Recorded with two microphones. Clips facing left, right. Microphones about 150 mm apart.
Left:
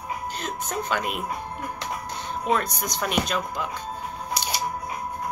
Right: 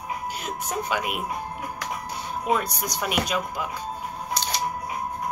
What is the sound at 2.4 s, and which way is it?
Speech, 10° right (ahead or behind).